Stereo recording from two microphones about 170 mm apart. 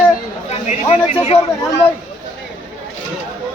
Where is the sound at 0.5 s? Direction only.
40° left (ahead or behind).